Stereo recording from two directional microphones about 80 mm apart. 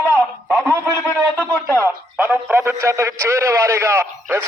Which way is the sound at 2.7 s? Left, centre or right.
Right.